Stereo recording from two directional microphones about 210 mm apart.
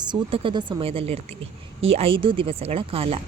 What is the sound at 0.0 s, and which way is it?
Speech, 25° right (ahead or behind).